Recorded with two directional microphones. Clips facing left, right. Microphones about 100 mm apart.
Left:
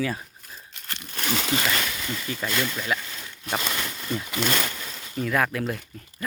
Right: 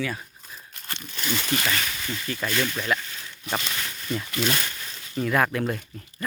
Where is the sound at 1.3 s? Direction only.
90° left.